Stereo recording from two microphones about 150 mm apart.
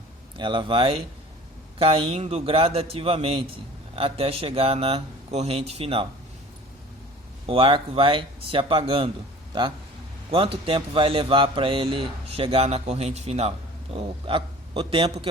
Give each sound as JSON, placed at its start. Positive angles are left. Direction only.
{"t": 0.3, "sound": "speech", "side_deg": -35}
{"t": 7.4, "sound": "speech", "side_deg": -35}